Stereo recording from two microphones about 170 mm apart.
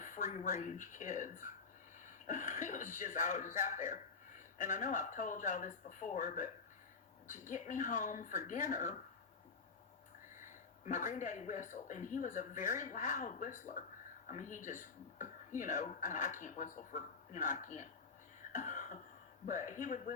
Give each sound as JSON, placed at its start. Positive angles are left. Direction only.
{"t": 0.0, "sound": "speech", "side_deg": 50}
{"t": 10.4, "sound": "speech", "side_deg": 50}
{"t": 18.5, "sound": "cough", "side_deg": 50}
{"t": 19.5, "sound": "speech", "side_deg": 50}